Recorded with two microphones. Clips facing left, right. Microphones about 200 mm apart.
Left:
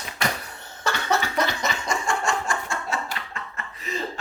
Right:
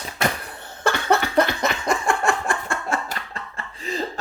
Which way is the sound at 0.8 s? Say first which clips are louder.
Right 4 dB; 55° right (ahead or behind).